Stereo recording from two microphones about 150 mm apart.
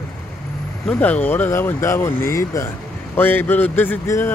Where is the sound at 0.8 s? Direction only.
10° left (ahead or behind).